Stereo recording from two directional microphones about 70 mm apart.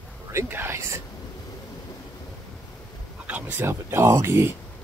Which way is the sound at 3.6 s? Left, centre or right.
Right.